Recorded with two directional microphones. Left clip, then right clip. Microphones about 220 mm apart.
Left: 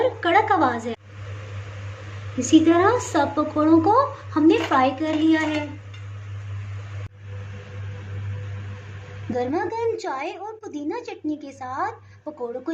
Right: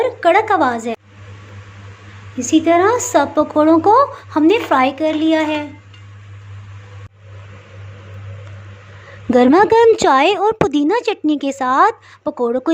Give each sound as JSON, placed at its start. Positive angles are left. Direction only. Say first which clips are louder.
{"t": 0.0, "sound": "a woman's voice", "louder": "right 6 dB", "side_deg": -35}
{"t": 2.4, "sound": "a woman's voice", "louder": "right 4 dB", "side_deg": -25}
{"t": 9.3, "sound": "a woman's voice", "louder": "right 15 dB", "side_deg": -40}